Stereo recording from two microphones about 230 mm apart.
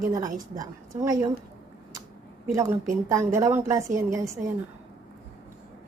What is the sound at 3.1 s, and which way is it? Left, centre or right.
Speech, centre.